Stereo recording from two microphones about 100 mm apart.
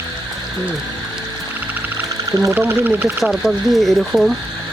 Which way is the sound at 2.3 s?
35° right (ahead or behind).